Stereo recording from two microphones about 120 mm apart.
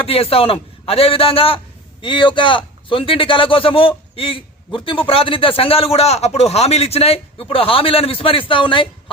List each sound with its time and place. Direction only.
0.0 s a man's voice: 55° left (ahead or behind)